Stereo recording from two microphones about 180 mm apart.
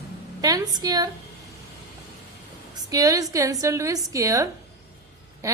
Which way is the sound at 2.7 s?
20° right (ahead or behind).